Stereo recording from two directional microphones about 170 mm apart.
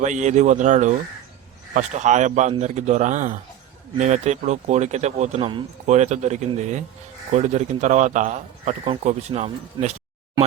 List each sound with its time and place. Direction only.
0.0 s speech: 45° right (ahead or behind)